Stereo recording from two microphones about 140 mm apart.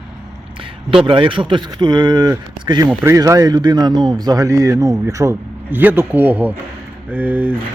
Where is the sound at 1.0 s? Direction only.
35° right (ahead or behind); by 7.6 s 10° right (ahead or behind).